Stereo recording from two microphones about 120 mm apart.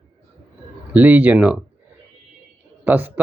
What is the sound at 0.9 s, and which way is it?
Speech, 15° right (ahead or behind).